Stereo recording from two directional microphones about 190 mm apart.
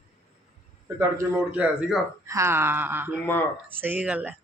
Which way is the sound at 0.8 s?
15° right (ahead or behind).